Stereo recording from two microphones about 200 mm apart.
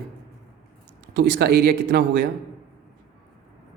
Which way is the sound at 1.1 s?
60° right (ahead or behind).